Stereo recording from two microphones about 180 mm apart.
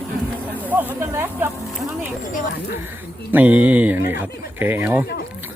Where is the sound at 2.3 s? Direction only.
60° left (ahead or behind).